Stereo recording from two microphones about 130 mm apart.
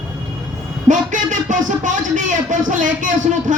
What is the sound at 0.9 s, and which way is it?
Speech, 75° right (ahead or behind).